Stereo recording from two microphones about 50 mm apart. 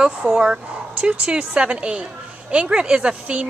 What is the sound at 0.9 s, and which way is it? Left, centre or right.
A woman's voice, right.